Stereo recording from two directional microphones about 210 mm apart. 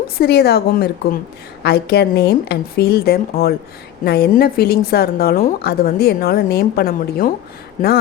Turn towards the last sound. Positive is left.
turn(degrees=40)  # may be behind; listen again after turning